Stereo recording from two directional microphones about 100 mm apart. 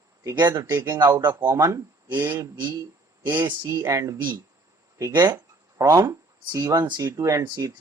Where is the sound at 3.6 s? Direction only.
40° right (ahead or behind).